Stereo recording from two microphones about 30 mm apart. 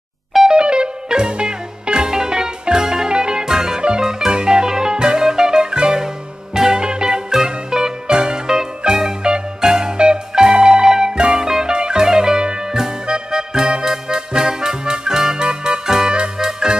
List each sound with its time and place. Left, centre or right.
0.5 s music: right